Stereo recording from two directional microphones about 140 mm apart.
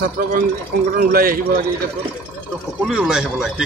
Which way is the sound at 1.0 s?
90° right.